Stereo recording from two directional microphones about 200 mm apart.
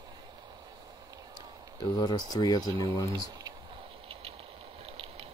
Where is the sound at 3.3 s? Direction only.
20° right (ahead or behind).